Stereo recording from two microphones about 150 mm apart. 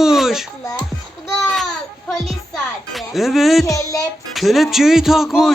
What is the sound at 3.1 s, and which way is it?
Speech, centre (ahead or behind).